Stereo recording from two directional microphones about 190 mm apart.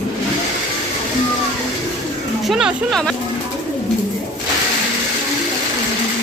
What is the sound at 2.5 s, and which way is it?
Speech, centre (ahead or behind).